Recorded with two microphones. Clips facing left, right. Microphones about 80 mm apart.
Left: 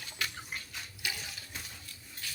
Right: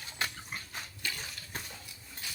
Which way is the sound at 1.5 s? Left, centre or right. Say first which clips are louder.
Right 5 dB; right.